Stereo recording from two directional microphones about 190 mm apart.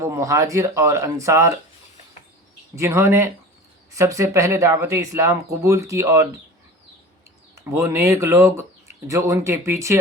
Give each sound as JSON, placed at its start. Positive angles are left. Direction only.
{"t": 0.0, "sound": "speech", "side_deg": -15}
{"t": 2.7, "sound": "speech", "side_deg": -15}
{"t": 7.5, "sound": "speech", "side_deg": -15}